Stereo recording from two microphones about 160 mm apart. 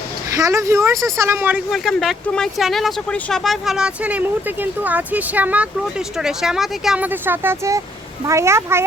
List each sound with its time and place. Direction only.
0.3 s speech: 20° right (ahead or behind)
0.9 s speech: 5° left (ahead or behind)
1.2 s speech: 15° right (ahead or behind)
1.7 s speech: centre (ahead or behind); by 8.8 s 15° right (ahead or behind)